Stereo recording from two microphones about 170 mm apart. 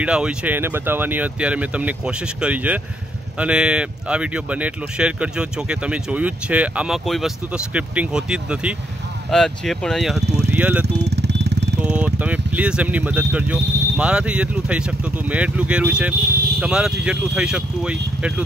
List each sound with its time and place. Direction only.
0.0 s speech: 5° right (ahead or behind)
10.2 s vehicle: 75° right (ahead or behind)
10.5 s speech: 10° right (ahead or behind)
10.9 s vehicle: 85° right
11.8 s speech: 5° right (ahead or behind)